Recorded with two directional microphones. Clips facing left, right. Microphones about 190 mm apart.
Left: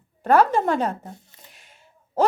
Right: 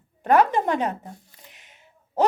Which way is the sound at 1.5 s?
20° right (ahead or behind).